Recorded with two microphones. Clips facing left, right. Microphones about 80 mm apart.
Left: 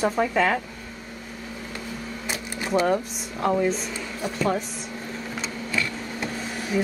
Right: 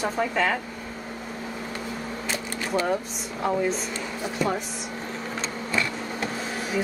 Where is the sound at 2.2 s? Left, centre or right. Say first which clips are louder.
Left 2 dB; centre.